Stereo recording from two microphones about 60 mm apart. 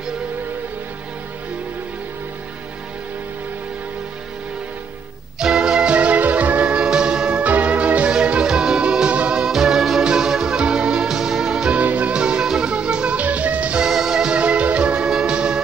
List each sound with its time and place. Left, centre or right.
5.4 s music: centre